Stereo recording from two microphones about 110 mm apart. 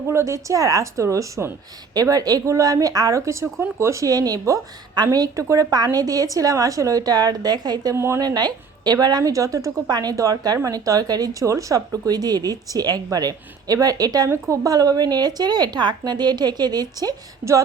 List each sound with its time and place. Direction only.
0.1 s a woman's voice: 25° right (ahead or behind)
7.9 s speech: 25° right (ahead or behind)
8.2 s a woman's voice: 40° right (ahead or behind)